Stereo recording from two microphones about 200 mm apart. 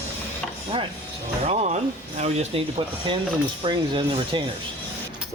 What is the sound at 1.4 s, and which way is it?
Speech, 35° right (ahead or behind).